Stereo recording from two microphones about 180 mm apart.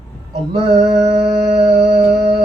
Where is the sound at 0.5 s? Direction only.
35° right (ahead or behind).